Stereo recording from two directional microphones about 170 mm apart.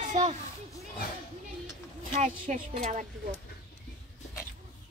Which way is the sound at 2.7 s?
45° right (ahead or behind).